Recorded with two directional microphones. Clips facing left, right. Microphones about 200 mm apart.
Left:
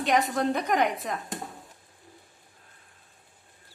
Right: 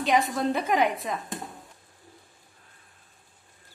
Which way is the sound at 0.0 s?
Centre (ahead or behind).